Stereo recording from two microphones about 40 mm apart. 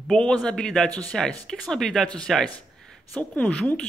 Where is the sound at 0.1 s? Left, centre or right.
Left; by 2.0 s centre.